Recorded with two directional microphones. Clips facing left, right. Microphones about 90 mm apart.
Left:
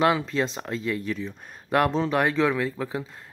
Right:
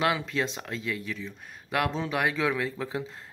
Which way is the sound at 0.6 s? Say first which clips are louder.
Left 5 dB; 35° left (ahead or behind).